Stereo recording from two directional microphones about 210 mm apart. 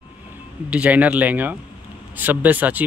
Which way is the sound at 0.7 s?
5° right (ahead or behind).